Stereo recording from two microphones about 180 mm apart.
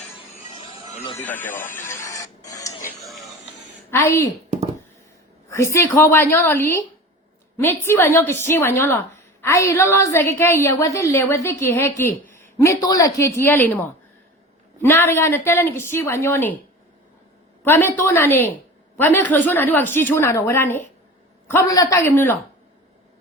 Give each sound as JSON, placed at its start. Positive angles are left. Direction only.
{"t": 1.2, "sound": "a woman's voice", "side_deg": 10}
{"t": 1.7, "sound": "printer", "side_deg": 15}
{"t": 3.9, "sound": "a woman's voice", "side_deg": 15}
{"t": 5.5, "sound": "a woman's voice", "side_deg": 15}
{"t": 17.6, "sound": "a woman's voice", "side_deg": 10}